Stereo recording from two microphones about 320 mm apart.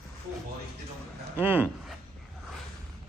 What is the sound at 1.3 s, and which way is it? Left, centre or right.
Speech, centre.